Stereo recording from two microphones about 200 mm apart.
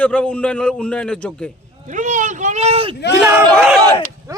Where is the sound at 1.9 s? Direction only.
40° right (ahead or behind).